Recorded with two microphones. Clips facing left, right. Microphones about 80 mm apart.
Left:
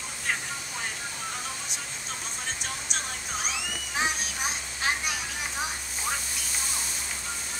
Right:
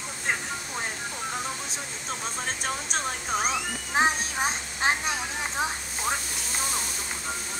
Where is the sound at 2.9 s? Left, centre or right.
Right.